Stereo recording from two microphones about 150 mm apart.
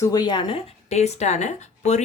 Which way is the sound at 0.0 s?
25° left (ahead or behind).